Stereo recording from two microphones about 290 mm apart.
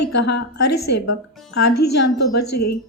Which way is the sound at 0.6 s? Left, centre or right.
Left.